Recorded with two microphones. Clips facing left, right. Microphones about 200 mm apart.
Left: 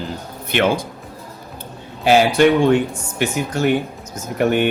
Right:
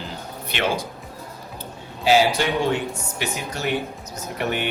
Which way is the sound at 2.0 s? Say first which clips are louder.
Left 6 dB; 55° left (ahead or behind).